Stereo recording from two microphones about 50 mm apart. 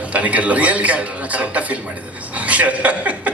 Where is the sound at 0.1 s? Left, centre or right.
Right.